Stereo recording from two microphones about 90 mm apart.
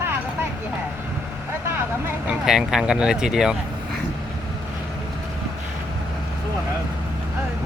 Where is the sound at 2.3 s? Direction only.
5° right (ahead or behind).